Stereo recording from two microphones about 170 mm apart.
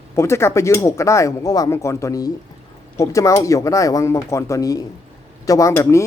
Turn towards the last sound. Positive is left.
turn(degrees=15)  # may be behind; listen again after turning